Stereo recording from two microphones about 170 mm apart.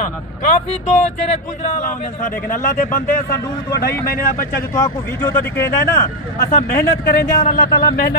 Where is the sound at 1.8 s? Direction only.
50° left (ahead or behind).